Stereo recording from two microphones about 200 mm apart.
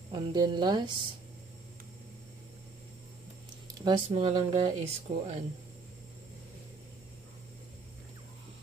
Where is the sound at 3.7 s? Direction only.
20° right (ahead or behind).